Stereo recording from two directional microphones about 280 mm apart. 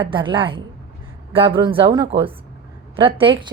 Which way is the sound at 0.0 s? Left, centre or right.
Centre.